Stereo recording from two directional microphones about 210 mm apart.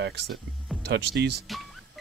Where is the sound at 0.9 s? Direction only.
55° right (ahead or behind).